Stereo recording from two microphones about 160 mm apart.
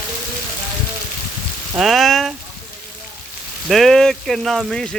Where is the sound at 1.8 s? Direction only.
Centre (ahead or behind).